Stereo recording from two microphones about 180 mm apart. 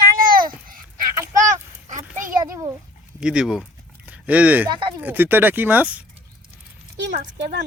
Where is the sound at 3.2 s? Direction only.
5° right (ahead or behind).